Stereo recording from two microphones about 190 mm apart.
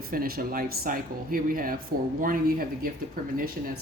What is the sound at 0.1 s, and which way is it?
Speech, 50° right (ahead or behind).